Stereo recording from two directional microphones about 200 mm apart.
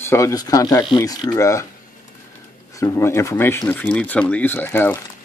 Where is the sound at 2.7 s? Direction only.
15° left (ahead or behind).